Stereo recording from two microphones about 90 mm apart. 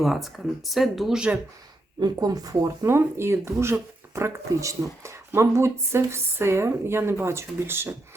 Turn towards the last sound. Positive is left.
turn(degrees=-25)  # may be behind; listen again after turning